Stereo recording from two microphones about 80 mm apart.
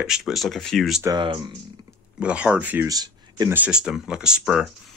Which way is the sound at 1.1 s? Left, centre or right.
Right.